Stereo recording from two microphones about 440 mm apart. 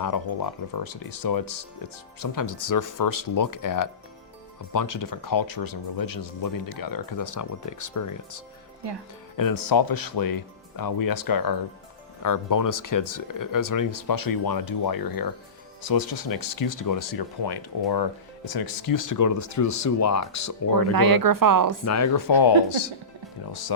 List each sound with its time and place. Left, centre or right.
0.7 s speech: left
20.9 s speech: right
21.8 s speech: left